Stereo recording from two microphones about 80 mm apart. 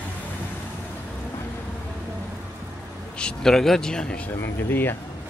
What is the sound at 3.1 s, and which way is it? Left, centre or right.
A man's voice, centre.